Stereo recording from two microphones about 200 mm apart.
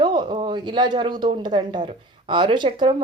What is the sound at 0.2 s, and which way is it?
Speech, 25° right (ahead or behind).